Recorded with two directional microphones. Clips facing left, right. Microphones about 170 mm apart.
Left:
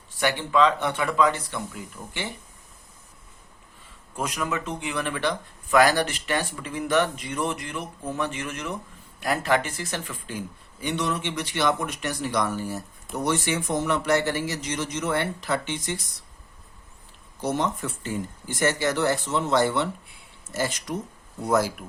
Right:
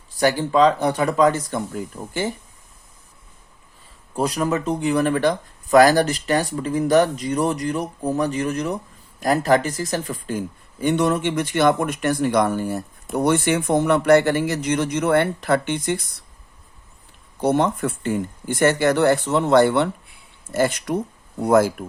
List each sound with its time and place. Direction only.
0.2 s speech: 40° right (ahead or behind)
4.1 s speech: 35° right (ahead or behind); by 16.0 s 55° right (ahead or behind)
17.4 s speech: 60° right (ahead or behind)